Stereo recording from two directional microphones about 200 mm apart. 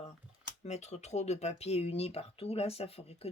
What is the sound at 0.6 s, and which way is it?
Speech, 35° left (ahead or behind).